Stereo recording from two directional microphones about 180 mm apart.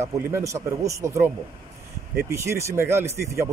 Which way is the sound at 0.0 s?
15° right (ahead or behind).